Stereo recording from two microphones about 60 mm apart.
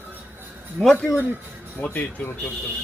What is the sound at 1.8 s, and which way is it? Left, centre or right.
Speech, left.